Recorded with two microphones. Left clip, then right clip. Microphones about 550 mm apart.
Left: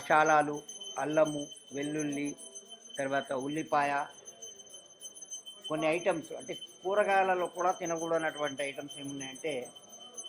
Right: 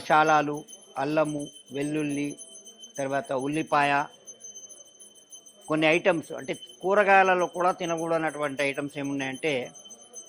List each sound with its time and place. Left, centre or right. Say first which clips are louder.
0.1 s a man's voice: right 4 dB; right
5.6 s a man's voice: right 8 dB; right